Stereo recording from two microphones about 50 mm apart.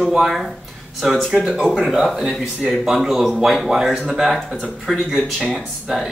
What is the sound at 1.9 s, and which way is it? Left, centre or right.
Speech, centre.